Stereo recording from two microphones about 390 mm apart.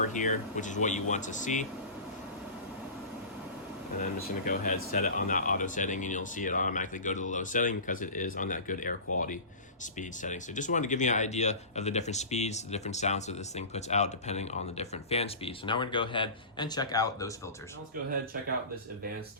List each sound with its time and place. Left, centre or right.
0.1 s speech: centre
3.9 s speech: centre